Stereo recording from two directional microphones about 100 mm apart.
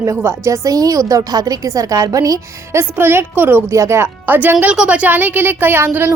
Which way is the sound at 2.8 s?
20° right (ahead or behind).